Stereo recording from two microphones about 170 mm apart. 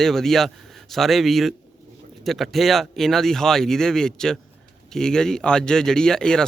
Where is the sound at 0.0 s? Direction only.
Centre (ahead or behind).